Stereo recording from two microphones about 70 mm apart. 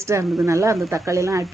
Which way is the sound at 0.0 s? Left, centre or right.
Right.